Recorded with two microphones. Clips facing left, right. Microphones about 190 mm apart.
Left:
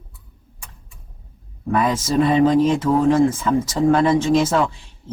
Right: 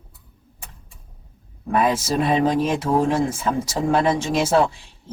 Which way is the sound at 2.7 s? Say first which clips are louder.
Left 4 dB; 10° right (ahead or behind).